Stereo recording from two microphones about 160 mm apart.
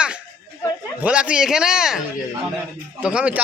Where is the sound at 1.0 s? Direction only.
5° right (ahead or behind).